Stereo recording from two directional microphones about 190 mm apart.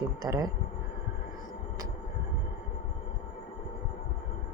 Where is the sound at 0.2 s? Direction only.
20° right (ahead or behind).